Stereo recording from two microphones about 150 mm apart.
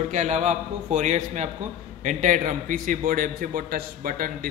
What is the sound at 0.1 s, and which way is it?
A man's voice, 50° right (ahead or behind).